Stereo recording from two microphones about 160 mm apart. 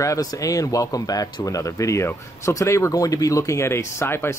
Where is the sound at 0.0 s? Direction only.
20° left (ahead or behind).